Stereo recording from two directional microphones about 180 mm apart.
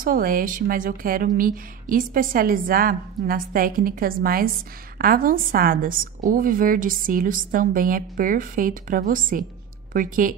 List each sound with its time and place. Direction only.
0.0 s a woman's voice: 50° right (ahead or behind)